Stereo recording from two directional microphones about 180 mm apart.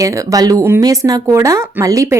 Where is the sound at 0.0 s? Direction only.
20° right (ahead or behind).